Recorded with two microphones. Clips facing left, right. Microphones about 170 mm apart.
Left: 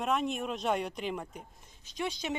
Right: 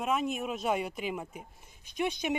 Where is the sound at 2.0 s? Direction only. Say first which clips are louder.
Right 4 dB; 20° right (ahead or behind).